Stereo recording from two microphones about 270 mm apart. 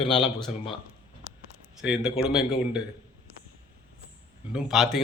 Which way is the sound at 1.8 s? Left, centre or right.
Centre.